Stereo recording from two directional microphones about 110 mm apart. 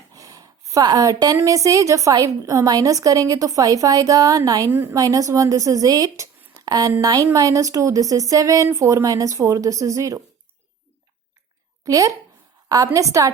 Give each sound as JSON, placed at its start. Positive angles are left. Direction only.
{"t": 0.1, "sound": "a sound", "side_deg": -30}
{"t": 1.4, "sound": "a woman's voice", "side_deg": -30}
{"t": 4.7, "sound": "a woman's voice", "side_deg": -15}
{"t": 4.9, "sound": "a woman's voice", "side_deg": -30}
{"t": 11.9, "sound": "a woman's voice", "side_deg": -30}